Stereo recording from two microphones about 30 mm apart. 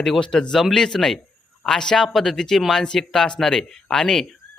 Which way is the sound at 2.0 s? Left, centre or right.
Centre.